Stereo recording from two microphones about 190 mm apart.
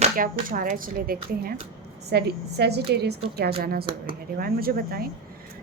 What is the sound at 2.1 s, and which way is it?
A woman's voice, 60° right (ahead or behind).